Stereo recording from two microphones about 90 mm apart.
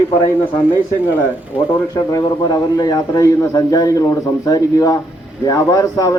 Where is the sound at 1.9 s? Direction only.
45° left (ahead or behind).